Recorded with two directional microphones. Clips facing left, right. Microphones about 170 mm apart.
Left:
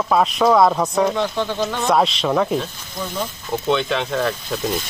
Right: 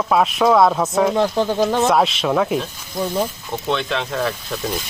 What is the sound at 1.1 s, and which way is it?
Speech, 35° right (ahead or behind).